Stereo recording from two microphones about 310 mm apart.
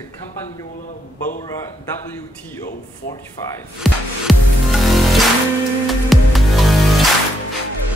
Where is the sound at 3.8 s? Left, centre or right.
Centre.